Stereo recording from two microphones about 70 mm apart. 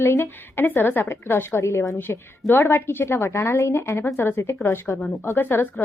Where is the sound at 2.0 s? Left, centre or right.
Left.